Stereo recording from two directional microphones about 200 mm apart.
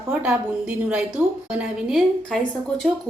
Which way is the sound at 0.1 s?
5° right (ahead or behind).